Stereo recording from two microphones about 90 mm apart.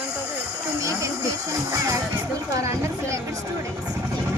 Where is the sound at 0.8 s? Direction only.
35° right (ahead or behind).